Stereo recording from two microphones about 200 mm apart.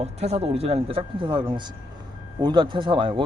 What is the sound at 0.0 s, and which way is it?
Speech, 30° right (ahead or behind).